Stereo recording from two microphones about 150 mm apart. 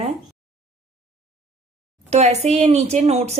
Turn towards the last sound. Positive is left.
turn(degrees=-45)  # may be behind; listen again after turning